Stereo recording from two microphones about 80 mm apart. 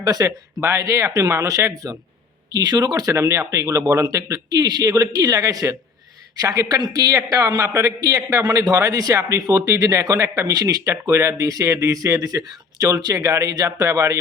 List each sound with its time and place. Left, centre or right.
0.0 s a man's voice: right
0.6 s a man's voice: right
3.2 s speech: right
4.1 s a man's voice: right